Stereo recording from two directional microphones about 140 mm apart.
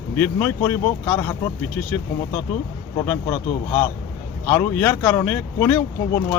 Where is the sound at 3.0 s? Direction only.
15° left (ahead or behind).